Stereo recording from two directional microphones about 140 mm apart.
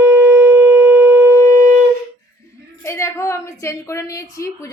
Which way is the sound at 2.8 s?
20° left (ahead or behind).